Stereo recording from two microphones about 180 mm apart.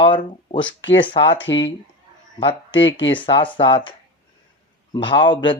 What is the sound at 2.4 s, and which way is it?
Speech, 30° left (ahead or behind).